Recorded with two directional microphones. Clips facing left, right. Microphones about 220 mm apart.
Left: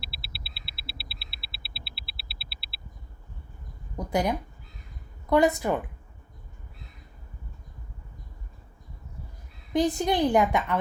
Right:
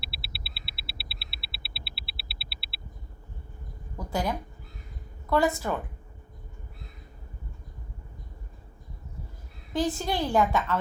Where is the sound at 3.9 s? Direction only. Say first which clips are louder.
Left 4 dB; 20° left (ahead or behind).